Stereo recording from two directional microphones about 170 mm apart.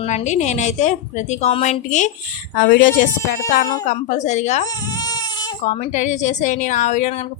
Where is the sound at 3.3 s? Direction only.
55° left (ahead or behind).